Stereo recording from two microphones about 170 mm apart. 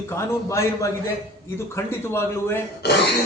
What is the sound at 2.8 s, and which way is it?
Speech, 80° left.